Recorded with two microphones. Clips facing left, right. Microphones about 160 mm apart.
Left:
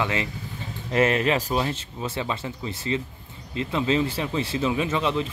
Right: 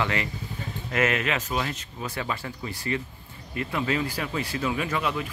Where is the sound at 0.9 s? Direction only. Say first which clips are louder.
Left 5 dB; 30° left (ahead or behind).